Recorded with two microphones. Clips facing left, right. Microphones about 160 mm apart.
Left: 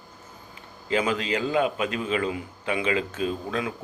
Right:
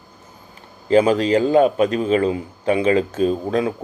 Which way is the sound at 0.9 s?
35° right (ahead or behind).